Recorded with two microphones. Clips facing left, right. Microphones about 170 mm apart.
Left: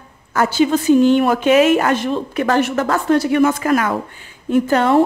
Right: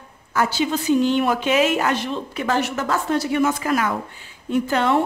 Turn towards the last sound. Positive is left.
turn(degrees=45)  # may be behind; listen again after turning